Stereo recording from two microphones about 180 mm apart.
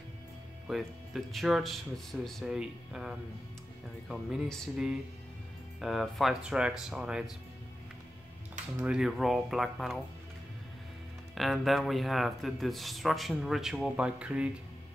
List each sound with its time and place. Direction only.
0.7 s speech: centre (ahead or behind)
8.8 s speech: 5° right (ahead or behind)
11.3 s speech: centre (ahead or behind)